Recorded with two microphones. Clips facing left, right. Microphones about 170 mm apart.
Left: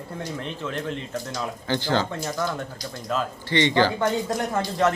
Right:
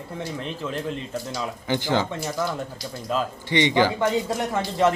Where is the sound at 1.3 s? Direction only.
15° right (ahead or behind).